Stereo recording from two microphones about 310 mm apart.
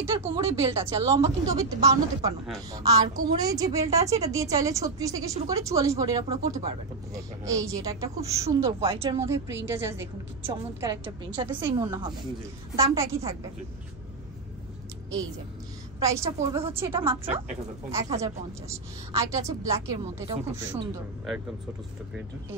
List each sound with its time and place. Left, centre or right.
0.0 s a woman's voice: centre
16.0 s a woman's voice: centre